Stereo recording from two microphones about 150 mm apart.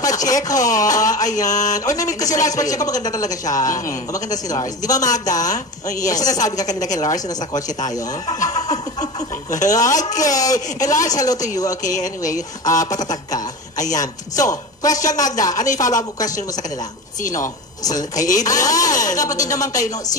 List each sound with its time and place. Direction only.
0.0 s a man's voice: 25° left (ahead or behind)
9.0 s a sound: 50° left (ahead or behind)
9.6 s a man's voice: 25° left (ahead or behind)
11.8 s speech: 60° left (ahead or behind)
12.7 s a man's voice: 25° left (ahead or behind)